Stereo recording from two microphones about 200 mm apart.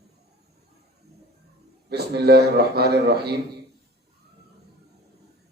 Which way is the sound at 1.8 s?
55° right (ahead or behind).